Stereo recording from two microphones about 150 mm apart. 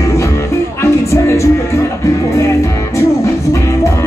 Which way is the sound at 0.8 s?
20° left (ahead or behind).